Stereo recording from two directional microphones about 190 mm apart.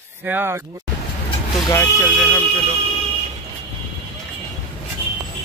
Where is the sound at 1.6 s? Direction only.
10° left (ahead or behind).